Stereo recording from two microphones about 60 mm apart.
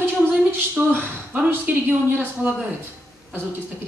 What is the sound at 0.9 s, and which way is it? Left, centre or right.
Speech, right.